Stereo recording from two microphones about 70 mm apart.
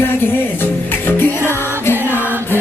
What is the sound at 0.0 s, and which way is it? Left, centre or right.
Music, left.